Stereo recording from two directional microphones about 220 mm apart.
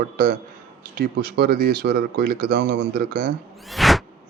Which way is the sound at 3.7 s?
Centre (ahead or behind).